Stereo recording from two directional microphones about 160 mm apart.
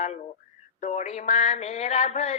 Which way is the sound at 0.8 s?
45° left (ahead or behind).